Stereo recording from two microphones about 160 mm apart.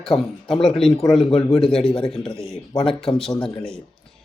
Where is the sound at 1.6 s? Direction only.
35° left (ahead or behind).